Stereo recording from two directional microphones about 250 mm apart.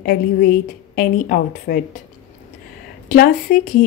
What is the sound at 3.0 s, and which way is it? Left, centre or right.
Speech, left.